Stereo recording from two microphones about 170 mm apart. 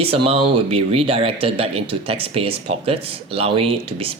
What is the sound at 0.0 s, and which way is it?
Speech, 35° right (ahead or behind).